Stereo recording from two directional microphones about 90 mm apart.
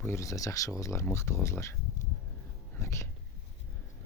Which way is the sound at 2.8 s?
30° left (ahead or behind).